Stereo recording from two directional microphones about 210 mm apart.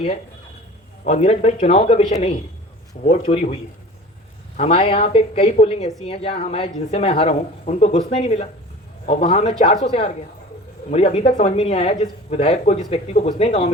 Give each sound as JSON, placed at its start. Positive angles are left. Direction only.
{"t": 1.0, "sound": "speech", "side_deg": 30}